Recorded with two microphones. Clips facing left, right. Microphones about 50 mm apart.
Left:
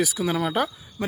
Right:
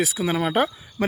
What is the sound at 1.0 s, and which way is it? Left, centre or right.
Speech, right.